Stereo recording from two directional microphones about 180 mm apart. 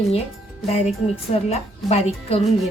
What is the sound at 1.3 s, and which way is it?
Speech, 35° left (ahead or behind).